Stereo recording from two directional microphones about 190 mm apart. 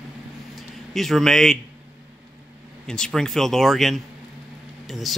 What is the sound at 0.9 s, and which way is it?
Speech, centre (ahead or behind).